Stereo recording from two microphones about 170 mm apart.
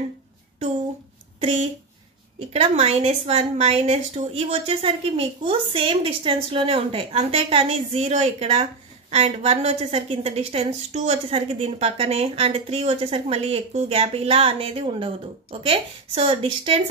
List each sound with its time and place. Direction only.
1.4 s a woman's voice: 40° right (ahead or behind)